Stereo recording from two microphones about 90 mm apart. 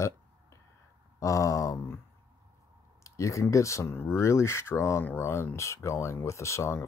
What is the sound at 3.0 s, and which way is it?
Speech, 35° left (ahead or behind).